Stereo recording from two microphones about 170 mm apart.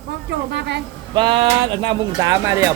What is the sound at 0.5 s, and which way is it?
Speech, 90° right.